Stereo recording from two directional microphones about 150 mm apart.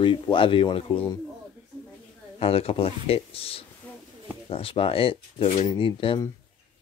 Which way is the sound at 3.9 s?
10° left (ahead or behind).